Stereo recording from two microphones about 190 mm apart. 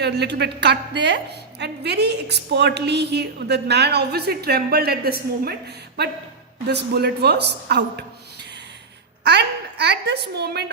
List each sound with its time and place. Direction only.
0.0 s a woman's voice: 60° right (ahead or behind)
9.2 s a woman's voice: 60° right (ahead or behind)